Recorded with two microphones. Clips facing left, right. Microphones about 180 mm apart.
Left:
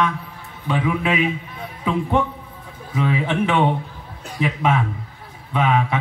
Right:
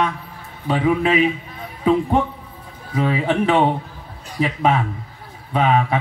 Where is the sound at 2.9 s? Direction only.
40° right (ahead or behind).